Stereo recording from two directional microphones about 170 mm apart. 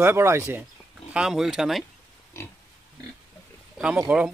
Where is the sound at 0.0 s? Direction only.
15° right (ahead or behind).